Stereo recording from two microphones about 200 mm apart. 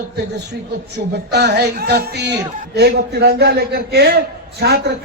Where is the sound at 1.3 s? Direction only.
55° right (ahead or behind).